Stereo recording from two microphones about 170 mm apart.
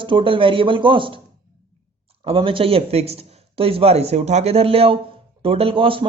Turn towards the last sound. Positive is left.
turn(degrees=-30)  # may be behind; listen again after turning